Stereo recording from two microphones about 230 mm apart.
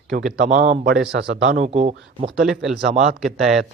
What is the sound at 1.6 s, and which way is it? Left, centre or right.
Speech, right.